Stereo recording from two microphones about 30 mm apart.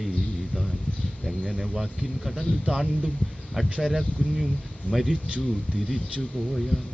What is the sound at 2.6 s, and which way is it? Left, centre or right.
Speech, centre.